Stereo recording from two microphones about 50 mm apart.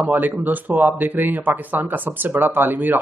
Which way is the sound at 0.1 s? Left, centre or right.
Right.